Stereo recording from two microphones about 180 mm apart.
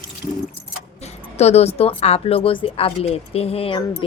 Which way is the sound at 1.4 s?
35° left (ahead or behind).